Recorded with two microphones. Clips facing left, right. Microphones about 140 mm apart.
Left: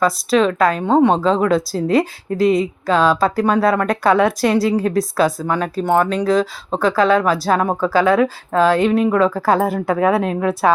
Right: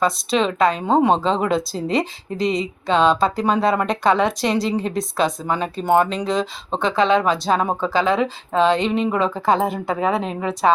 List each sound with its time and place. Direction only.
0.0 s speech: centre (ahead or behind)
4.8 s speech: 20° right (ahead or behind)
5.6 s speech: centre (ahead or behind)